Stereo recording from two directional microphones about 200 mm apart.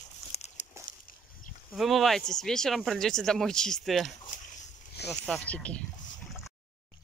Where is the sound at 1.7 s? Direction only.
Centre (ahead or behind).